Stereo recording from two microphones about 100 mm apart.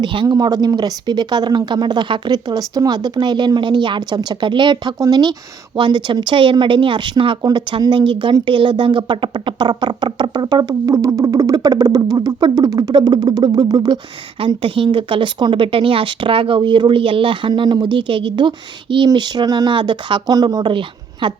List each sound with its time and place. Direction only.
0.0 s speech: 55° right (ahead or behind)
0.3 s speech: 40° right (ahead or behind)
5.7 s speech: 55° right (ahead or behind)
7.4 s speech: 45° right (ahead or behind)
12.9 s speech: 45° right (ahead or behind)
14.3 s speech: 65° right (ahead or behind)